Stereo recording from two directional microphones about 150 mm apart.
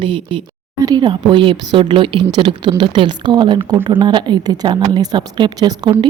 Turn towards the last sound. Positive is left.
turn(degrees=-30)  # may be behind; listen again after turning